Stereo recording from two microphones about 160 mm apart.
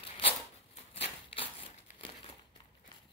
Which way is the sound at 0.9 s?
35° left (ahead or behind).